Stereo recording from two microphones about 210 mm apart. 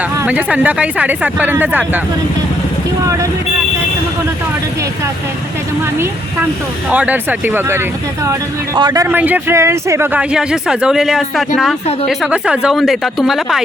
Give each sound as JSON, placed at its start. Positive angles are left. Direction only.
{"t": 0.2, "sound": "speech", "side_deg": -5}
{"t": 6.9, "sound": "speech", "side_deg": -5}